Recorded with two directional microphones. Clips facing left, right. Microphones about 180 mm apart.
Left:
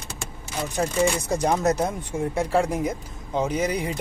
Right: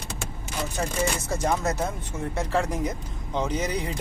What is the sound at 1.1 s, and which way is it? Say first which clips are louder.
Speech: left 3 dB; 15° left (ahead or behind).